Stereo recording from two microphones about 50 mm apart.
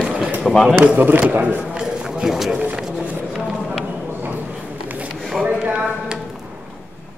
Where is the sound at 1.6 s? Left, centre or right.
Centre.